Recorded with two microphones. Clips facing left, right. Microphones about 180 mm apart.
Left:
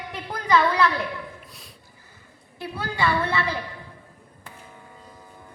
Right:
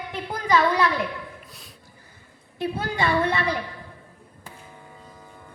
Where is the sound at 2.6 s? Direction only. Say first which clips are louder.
Right 1 dB; 20° right (ahead or behind).